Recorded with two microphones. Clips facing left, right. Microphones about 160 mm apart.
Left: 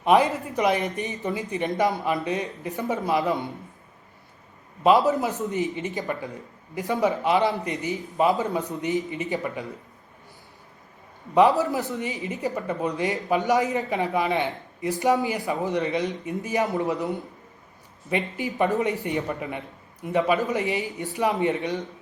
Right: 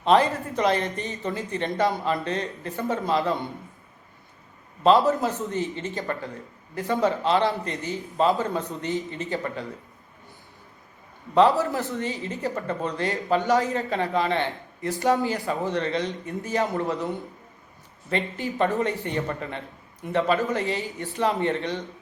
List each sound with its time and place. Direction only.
0.0 s speech: 15° left (ahead or behind)
5.0 s speech: 15° left (ahead or behind)
11.3 s speech: 20° left (ahead or behind)